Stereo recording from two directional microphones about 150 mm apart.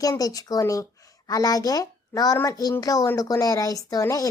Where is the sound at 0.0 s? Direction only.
25° left (ahead or behind).